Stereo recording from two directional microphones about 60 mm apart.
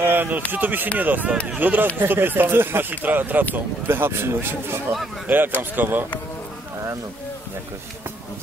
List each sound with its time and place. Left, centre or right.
0.0 s speech: right